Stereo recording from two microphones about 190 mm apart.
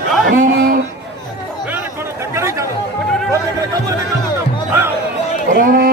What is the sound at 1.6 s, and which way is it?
Chatter, 10° right (ahead or behind).